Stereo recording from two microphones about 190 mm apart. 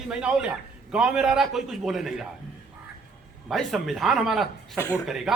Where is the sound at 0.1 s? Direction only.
5° right (ahead or behind).